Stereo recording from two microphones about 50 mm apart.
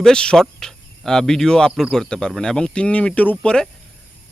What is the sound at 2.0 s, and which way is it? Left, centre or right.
Speech, centre.